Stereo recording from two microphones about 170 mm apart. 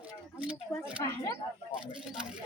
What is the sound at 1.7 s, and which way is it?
Speech, 5° right (ahead or behind).